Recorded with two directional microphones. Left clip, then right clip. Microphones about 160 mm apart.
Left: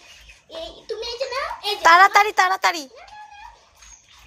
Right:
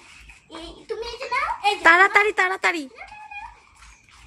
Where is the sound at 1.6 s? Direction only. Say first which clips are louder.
Left 2 dB; 15° right (ahead or behind).